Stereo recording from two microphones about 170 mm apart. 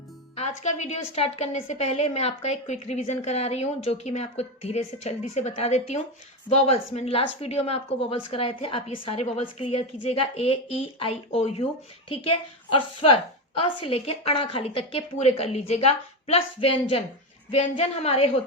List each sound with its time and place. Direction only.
0.3 s a woman's voice: 40° left (ahead or behind)